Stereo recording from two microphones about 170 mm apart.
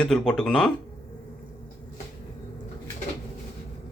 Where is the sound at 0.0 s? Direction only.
5° left (ahead or behind).